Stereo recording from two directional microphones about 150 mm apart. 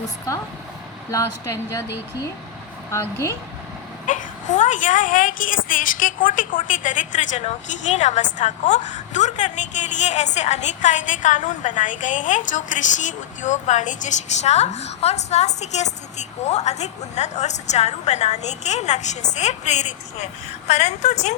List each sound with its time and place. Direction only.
1.1 s speech: 20° left (ahead or behind)
2.9 s speech: 20° left (ahead or behind)
4.0 s a woman's voice: 60° left (ahead or behind)